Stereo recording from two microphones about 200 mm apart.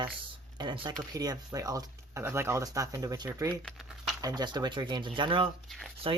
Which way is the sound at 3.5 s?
5° left (ahead or behind).